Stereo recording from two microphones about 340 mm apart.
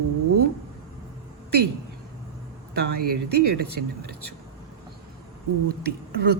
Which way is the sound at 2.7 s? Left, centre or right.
Right.